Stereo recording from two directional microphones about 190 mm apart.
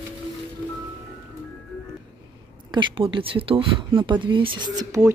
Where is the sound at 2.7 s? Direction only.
25° right (ahead or behind).